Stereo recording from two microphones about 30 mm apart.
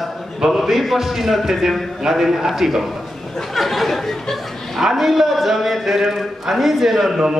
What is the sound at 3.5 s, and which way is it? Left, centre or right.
Chatter, centre.